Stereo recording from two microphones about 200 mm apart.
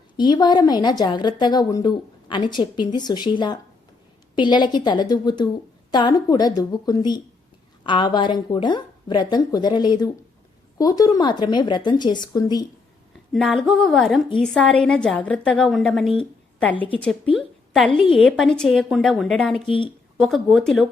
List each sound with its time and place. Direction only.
0.2 s a woman's voice: 20° left (ahead or behind)
13.3 s a woman's voice: centre (ahead or behind)
19.6 s a woman's voice: 25° left (ahead or behind)
20.1 s a woman's voice: centre (ahead or behind)